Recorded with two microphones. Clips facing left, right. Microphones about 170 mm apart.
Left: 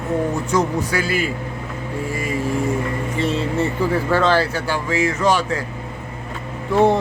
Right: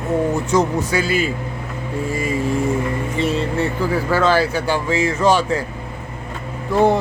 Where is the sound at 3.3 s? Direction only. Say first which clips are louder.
Even; centre (ahead or behind); by 5.4 s 30° right (ahead or behind).